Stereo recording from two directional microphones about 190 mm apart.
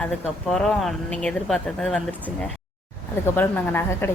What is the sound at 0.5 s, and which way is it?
Speech, 5° left (ahead or behind).